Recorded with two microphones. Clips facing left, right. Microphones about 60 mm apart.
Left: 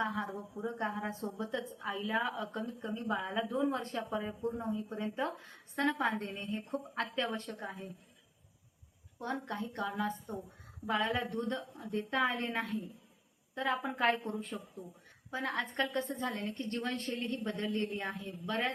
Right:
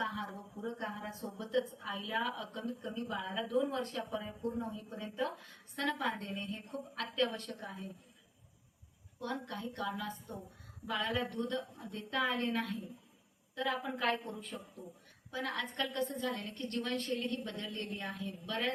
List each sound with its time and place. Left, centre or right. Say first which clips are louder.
0.0 s a woman's voice: left 3 dB; left
9.1 s a woman's voice: left 3 dB; left